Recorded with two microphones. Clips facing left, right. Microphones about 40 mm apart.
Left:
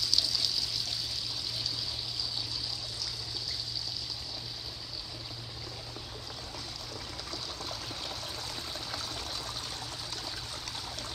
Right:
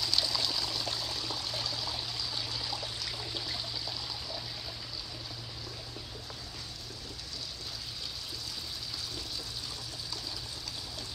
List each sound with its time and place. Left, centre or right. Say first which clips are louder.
0.0 s trickle: even; right
2.7 s water: right 2 dB; right